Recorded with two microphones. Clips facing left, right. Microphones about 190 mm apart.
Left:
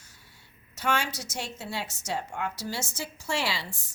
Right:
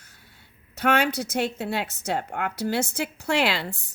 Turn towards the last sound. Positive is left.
turn(degrees=-60)  # may be behind; listen again after turning